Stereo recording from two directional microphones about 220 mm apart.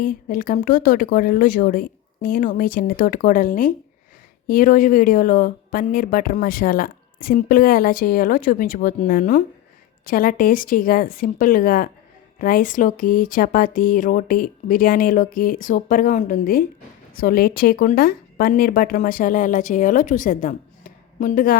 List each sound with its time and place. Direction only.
0.0 s a woman's voice: 40° left (ahead or behind)